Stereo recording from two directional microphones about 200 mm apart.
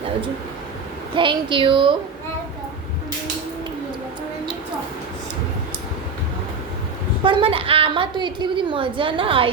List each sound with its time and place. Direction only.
1.1 s a woman's voice: 25° right (ahead or behind)
7.3 s a woman's voice: 25° right (ahead or behind)